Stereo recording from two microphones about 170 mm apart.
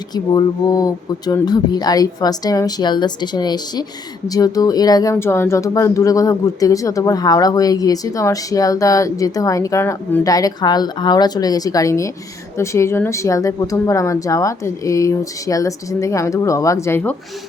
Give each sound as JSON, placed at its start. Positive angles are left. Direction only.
{"t": 0.1, "sound": "speech", "side_deg": 25}